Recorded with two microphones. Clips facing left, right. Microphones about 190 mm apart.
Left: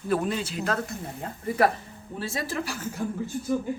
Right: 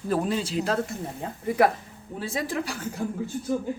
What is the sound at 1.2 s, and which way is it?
A woman's voice, 10° right (ahead or behind).